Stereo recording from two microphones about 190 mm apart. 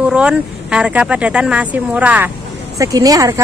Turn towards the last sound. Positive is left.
turn(degrees=-20)  # may be behind; listen again after turning